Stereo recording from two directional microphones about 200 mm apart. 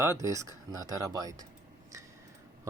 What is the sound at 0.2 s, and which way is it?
Speech, 15° right (ahead or behind).